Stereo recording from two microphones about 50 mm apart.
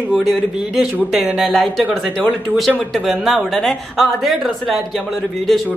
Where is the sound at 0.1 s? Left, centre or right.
Centre.